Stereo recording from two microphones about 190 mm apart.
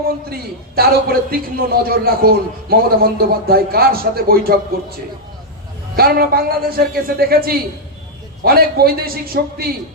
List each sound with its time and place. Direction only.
0.8 s a man's voice: 55° right (ahead or behind)
6.0 s a man's voice: 55° right (ahead or behind)